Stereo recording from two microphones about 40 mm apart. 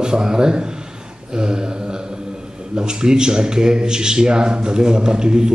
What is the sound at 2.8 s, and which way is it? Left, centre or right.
Speech, centre.